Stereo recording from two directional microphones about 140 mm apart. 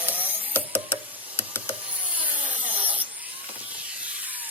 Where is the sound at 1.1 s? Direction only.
40° right (ahead or behind).